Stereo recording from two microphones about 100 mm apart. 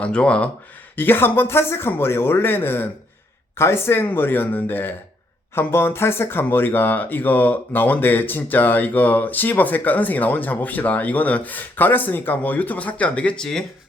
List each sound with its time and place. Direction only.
0.0 s speech: 10° left (ahead or behind)